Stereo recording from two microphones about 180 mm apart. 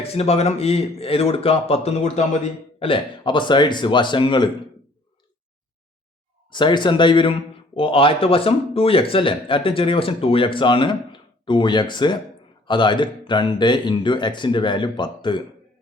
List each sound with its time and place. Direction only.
0.1 s speech: 35° left (ahead or behind)
6.5 s speech: 25° left (ahead or behind)